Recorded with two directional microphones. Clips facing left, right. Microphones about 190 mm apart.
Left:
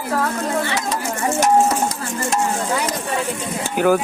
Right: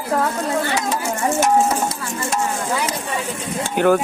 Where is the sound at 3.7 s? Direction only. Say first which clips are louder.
Right 1 dB; 5° left (ahead or behind).